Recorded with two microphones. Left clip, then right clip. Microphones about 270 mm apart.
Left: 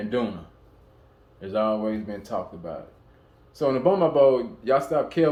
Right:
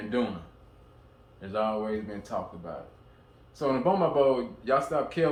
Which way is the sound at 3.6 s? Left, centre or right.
Left.